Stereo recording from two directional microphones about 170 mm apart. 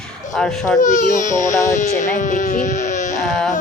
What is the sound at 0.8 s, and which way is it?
Speech, 50° left (ahead or behind).